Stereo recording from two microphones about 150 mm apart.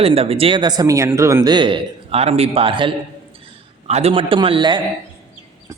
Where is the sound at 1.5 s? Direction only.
30° right (ahead or behind).